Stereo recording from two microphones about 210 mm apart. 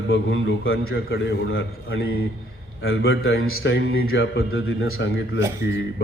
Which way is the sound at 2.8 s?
50° left (ahead or behind).